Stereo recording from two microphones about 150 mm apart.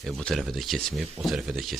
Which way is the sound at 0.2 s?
5° left (ahead or behind).